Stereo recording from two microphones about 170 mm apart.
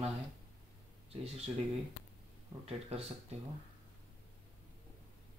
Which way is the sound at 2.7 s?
35° right (ahead or behind).